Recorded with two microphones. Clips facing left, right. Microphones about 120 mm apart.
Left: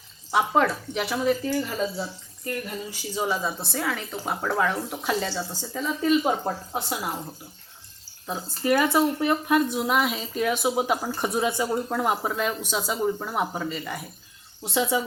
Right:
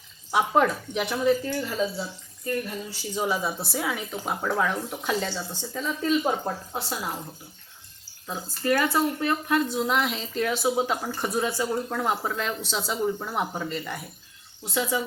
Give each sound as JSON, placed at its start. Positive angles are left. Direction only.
{"t": 0.3, "sound": "speech", "side_deg": 0}
{"t": 3.2, "sound": "speech", "side_deg": -5}
{"t": 8.3, "sound": "speech", "side_deg": 15}
{"t": 14.6, "sound": "speech", "side_deg": 25}